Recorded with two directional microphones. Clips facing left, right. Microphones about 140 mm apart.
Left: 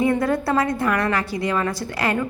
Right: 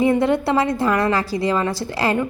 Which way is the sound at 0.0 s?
25° right (ahead or behind).